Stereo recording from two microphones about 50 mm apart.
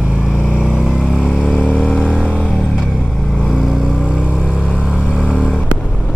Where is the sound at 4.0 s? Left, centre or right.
Right.